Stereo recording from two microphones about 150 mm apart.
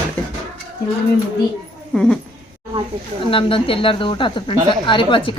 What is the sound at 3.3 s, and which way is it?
Speech, 35° left (ahead or behind).